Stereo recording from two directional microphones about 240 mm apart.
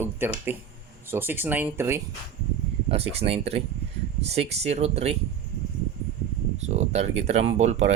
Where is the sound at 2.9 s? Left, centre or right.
Right.